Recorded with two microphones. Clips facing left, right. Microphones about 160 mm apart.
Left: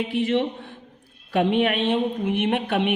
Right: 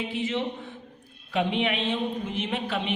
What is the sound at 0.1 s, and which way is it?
A woman's voice, 60° left (ahead or behind).